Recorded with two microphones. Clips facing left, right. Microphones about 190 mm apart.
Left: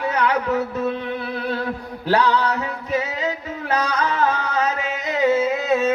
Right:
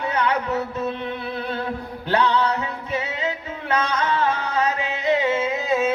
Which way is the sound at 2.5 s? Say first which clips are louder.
Left 3 dB; 35° left (ahead or behind).